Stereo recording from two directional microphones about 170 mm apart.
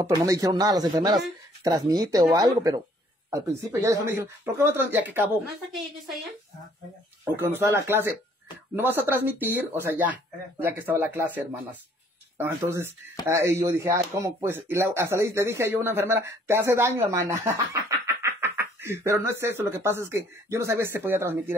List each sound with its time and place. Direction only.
0.0 s speech: 20° right (ahead or behind)
7.5 s speech: 15° right (ahead or behind)